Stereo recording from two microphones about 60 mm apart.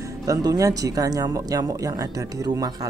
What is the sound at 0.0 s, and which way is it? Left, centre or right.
Speech, right.